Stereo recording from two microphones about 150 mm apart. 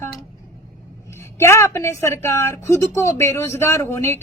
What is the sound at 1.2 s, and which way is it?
Speech, 15° left (ahead or behind).